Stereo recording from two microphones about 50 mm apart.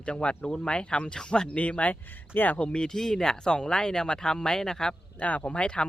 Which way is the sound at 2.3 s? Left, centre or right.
Left.